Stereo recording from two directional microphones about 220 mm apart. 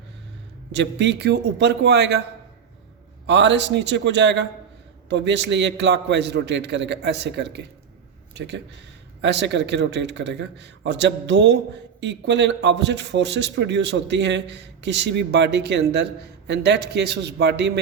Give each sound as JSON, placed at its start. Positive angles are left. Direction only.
{"t": 0.7, "sound": "a man's voice", "side_deg": -55}
{"t": 3.2, "sound": "a man's voice", "side_deg": -55}